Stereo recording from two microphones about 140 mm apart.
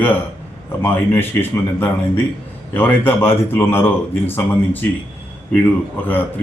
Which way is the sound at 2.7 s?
15° left (ahead or behind).